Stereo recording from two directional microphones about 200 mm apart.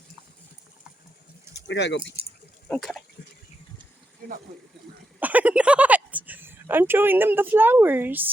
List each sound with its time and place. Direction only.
1.5 s speech: 60° left (ahead or behind)
2.6 s speech: 5° left (ahead or behind)
4.2 s a sound: 45° right (ahead or behind)
5.2 s a woman's voice: 10° right (ahead or behind)